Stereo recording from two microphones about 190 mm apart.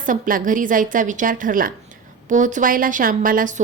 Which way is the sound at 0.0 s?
45° right (ahead or behind).